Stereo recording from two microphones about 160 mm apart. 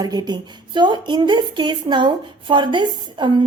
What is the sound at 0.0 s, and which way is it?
A woman's voice, 25° right (ahead or behind).